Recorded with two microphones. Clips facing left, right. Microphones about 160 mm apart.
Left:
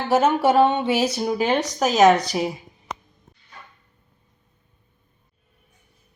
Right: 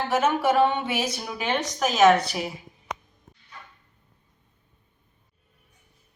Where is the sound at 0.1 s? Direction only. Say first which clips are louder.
Left 5 dB; 30° left (ahead or behind).